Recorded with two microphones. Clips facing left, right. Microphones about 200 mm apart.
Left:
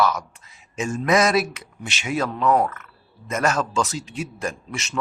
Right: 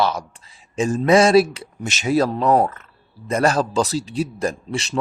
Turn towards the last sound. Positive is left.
turn(degrees=-35)  # may be behind; listen again after turning